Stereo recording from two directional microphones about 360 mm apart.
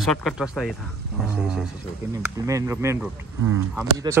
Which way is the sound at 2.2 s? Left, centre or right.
Centre.